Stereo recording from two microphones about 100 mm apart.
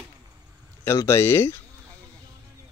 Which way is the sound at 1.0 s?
25° left (ahead or behind).